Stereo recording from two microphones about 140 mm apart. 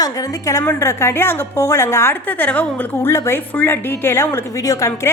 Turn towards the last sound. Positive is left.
turn(degrees=25)  # may be behind; listen again after turning